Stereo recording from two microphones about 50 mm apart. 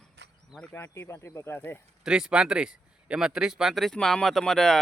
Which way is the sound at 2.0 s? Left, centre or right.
Centre.